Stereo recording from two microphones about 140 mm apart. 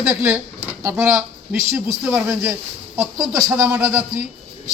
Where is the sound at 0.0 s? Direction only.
20° right (ahead or behind).